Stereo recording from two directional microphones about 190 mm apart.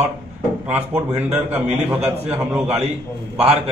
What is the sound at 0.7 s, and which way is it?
A man's voice, 10° right (ahead or behind).